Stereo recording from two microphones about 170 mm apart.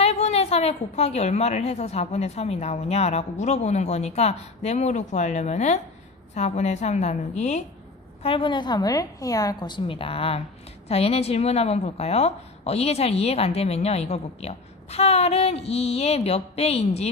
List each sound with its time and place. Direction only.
0.0 s speech: 40° left (ahead or behind)
8.2 s a woman's voice: 30° left (ahead or behind)